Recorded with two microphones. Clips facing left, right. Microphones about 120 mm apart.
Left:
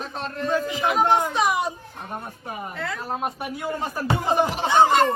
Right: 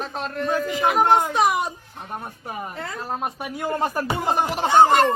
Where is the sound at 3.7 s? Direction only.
50° right (ahead or behind).